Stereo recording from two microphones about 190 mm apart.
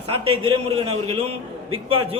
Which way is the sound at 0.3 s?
30° right (ahead or behind).